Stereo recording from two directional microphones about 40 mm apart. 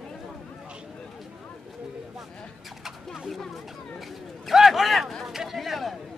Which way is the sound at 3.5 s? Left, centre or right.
Centre.